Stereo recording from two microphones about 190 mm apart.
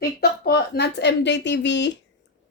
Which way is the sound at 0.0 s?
55° left (ahead or behind).